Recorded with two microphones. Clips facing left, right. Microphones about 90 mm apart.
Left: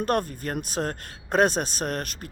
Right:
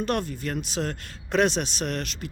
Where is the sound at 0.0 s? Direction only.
45° left (ahead or behind).